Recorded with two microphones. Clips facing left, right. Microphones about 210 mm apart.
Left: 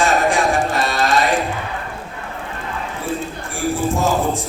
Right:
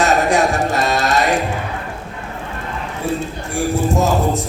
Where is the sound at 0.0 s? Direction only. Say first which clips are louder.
Right 2 dB; 40° right (ahead or behind).